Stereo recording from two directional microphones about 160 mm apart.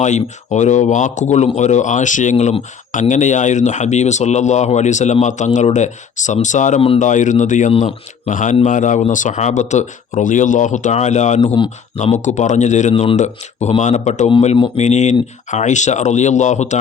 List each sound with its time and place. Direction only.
0.0 s speech: 45° left (ahead or behind)
7.7 s speech: 40° left (ahead or behind)
12.9 s speech: 35° left (ahead or behind)
13.1 s speech: 45° left (ahead or behind)